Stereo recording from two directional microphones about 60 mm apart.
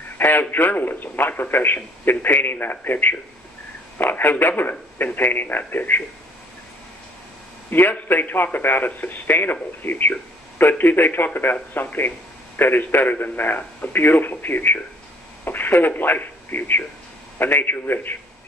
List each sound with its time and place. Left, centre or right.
0.2 s a man's voice: left
7.7 s a man's voice: left